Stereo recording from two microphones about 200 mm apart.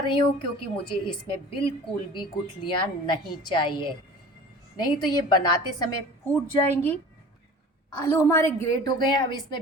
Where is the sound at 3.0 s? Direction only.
25° left (ahead or behind).